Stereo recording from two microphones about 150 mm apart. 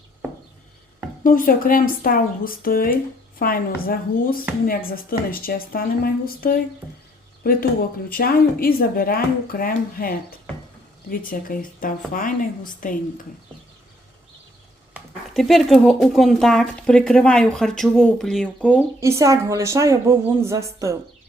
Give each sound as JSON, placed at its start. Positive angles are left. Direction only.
{"t": 1.2, "sound": "speech", "side_deg": 70}
{"t": 14.9, "sound": "speech", "side_deg": 0}
{"t": 18.9, "sound": "a woman's voice", "side_deg": -20}